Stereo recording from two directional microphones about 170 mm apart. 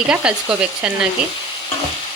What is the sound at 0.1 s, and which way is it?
Frying, 5° right (ahead or behind).